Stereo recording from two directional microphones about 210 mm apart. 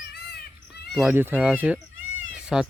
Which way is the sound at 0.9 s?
5° right (ahead or behind).